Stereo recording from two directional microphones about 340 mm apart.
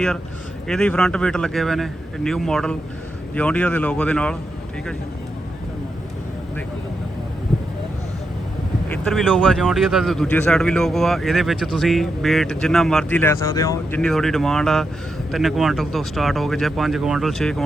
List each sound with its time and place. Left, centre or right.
0.7 s speech: centre
8.9 s speech: centre